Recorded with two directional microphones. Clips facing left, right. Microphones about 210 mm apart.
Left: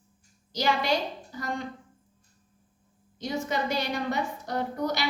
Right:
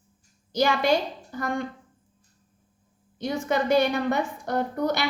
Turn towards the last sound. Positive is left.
turn(degrees=-55)  # may be behind; listen again after turning